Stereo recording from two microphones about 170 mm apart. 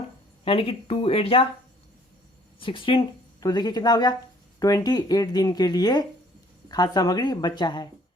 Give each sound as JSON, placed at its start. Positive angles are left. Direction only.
{"t": 0.4, "sound": "speech", "side_deg": 35}
{"t": 2.6, "sound": "speech", "side_deg": 30}